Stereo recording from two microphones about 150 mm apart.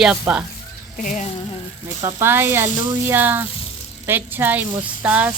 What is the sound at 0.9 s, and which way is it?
Speech, 65° left (ahead or behind).